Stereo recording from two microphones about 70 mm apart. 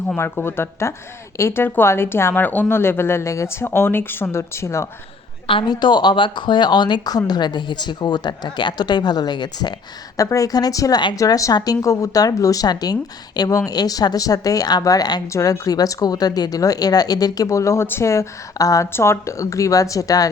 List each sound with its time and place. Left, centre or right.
0.4 s speech: left
5.6 s speech: left
10.2 s a woman's voice: left
11.5 s a woman's voice: left
13.7 s a woman's voice: left
15.3 s a woman's voice: left
18.9 s speech: left